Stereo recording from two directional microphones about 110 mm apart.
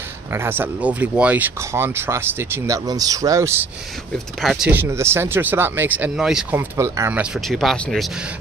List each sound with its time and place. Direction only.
0.3 s speech: 20° right (ahead or behind)
1.6 s speech: 25° right (ahead or behind)
4.4 s speech: centre (ahead or behind)
4.6 s speech: 20° right (ahead or behind)
6.8 s speech: 15° left (ahead or behind)
7.3 s speech: centre (ahead or behind)